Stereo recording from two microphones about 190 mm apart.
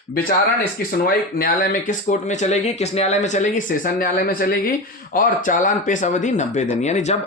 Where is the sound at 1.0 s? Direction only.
50° left (ahead or behind).